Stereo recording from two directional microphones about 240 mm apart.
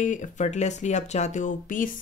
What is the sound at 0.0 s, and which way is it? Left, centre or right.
Speech, left.